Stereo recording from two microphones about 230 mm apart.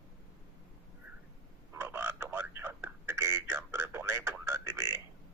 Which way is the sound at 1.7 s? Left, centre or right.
Centre.